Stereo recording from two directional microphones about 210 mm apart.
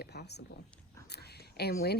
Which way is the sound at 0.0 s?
50° left (ahead or behind).